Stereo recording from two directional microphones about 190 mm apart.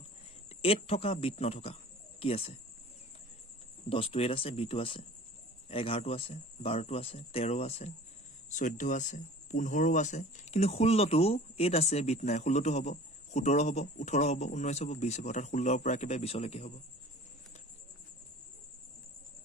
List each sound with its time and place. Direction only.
0.6 s speech: 30° left (ahead or behind)
3.8 s speech: 30° left (ahead or behind)